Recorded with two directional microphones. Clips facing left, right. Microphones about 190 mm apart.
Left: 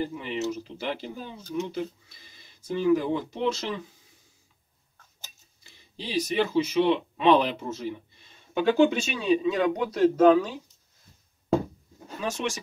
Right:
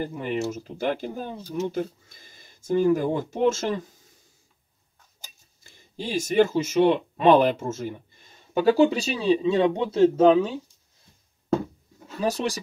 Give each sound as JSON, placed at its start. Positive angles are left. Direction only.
{"t": 0.0, "sound": "speech", "side_deg": -50}
{"t": 5.6, "sound": "speech", "side_deg": -45}
{"t": 12.2, "sound": "speech", "side_deg": -35}